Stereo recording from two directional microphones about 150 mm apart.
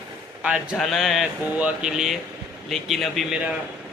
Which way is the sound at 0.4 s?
5° right (ahead or behind).